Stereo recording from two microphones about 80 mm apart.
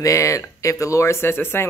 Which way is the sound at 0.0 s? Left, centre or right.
Left.